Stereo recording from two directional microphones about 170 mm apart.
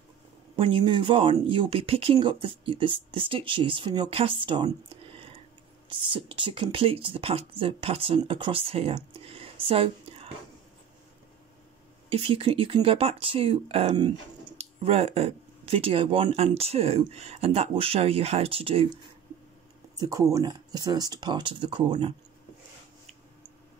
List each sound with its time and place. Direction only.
0.6 s speech: 30° right (ahead or behind)
5.9 s speech: 30° right (ahead or behind)
12.1 s speech: 35° right (ahead or behind)
20.0 s speech: 20° right (ahead or behind)